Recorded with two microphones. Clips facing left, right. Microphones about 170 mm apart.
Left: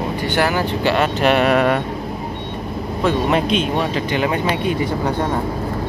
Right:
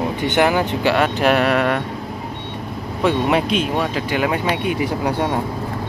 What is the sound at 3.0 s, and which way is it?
Speech, 10° right (ahead or behind).